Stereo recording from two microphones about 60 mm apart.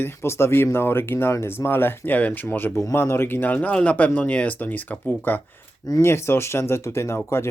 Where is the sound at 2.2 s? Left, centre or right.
Left.